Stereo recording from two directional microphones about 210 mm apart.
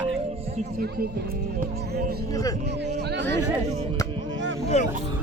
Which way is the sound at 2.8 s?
55° right (ahead or behind).